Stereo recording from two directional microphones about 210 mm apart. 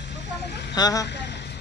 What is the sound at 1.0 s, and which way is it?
Vehicle, 55° left (ahead or behind).